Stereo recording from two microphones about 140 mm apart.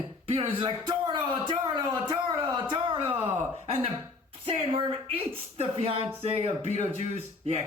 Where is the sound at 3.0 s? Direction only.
15° right (ahead or behind).